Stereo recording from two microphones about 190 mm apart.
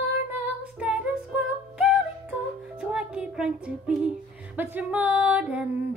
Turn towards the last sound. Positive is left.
turn(degrees=-10)  # may be behind; listen again after turning